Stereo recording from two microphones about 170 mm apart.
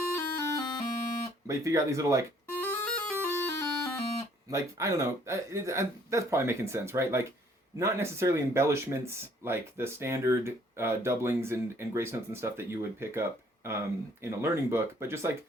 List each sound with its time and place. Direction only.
0.2 s music: 15° left (ahead or behind)
1.5 s speech: 20° right (ahead or behind)
2.6 s bagpipes: 10° left (ahead or behind)
4.4 s speech: 20° right (ahead or behind)